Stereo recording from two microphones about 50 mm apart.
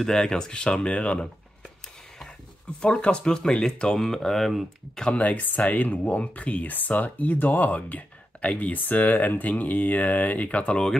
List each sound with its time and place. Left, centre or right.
0.0 s speech: centre
2.8 s speech: left
5.1 s speech: left